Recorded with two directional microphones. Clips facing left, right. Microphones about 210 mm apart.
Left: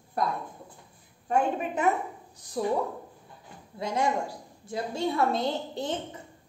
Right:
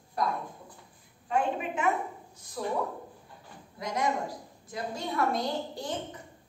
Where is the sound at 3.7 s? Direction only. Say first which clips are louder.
Left 3 dB; 30° left (ahead or behind).